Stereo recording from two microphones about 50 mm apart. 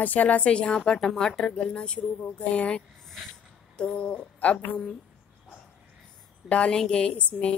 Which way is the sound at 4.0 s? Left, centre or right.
Left.